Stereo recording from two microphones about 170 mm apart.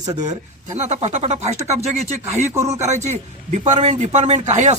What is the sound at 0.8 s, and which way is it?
Speech, 40° right (ahead or behind).